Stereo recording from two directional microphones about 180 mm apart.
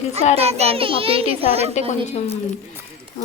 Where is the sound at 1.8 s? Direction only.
40° left (ahead or behind).